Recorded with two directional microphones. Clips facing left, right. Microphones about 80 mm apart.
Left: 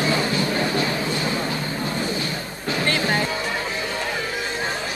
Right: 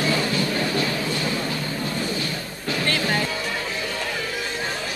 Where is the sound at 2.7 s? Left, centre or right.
Left.